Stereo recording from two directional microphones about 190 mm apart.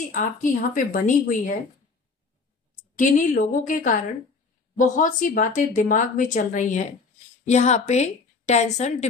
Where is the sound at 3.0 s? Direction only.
45° left (ahead or behind).